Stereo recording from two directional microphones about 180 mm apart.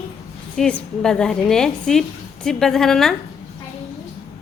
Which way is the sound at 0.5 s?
5° left (ahead or behind).